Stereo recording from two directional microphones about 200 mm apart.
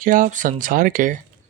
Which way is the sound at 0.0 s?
40° right (ahead or behind).